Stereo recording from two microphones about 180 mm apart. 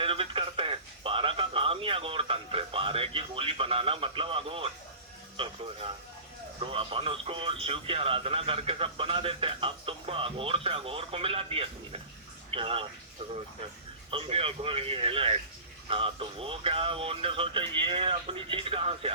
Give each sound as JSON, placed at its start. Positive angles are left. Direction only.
{"t": 0.0, "sound": "radio", "side_deg": -30}
{"t": 6.7, "sound": "speech", "side_deg": -30}
{"t": 14.1, "sound": "speech", "side_deg": -30}